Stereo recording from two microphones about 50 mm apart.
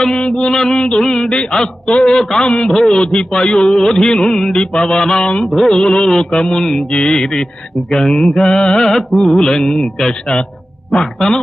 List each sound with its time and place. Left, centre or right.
0.0 s a man's voice: centre
3.7 s a man's voice: centre
5.5 s mantra: centre
5.8 s a man's voice: centre
10.1 s a man's voice: centre